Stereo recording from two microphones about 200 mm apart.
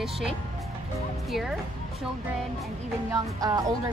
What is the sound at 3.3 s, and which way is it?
Speech, 20° right (ahead or behind).